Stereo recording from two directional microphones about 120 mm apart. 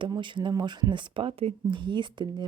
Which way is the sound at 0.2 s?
40° right (ahead or behind).